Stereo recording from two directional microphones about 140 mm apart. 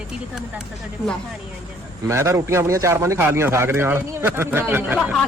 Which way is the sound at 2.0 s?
20° right (ahead or behind).